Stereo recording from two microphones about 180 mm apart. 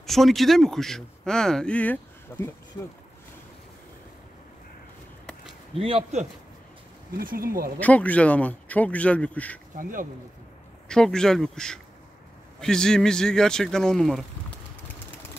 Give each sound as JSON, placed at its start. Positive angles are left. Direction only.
{"t": 0.0, "sound": "speech", "side_deg": 0}
{"t": 5.8, "sound": "speech", "side_deg": -30}
{"t": 7.2, "sound": "speech", "side_deg": -55}
{"t": 7.8, "sound": "speech", "side_deg": 10}
{"t": 9.8, "sound": "speech", "side_deg": -50}
{"t": 10.9, "sound": "speech", "side_deg": 5}